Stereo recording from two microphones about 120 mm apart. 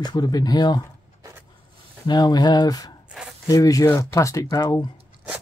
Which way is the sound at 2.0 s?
35° left (ahead or behind).